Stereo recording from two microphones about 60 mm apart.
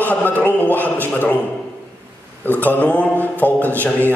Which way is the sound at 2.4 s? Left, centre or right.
Left.